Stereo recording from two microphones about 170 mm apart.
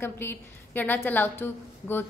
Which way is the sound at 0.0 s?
15° left (ahead or behind).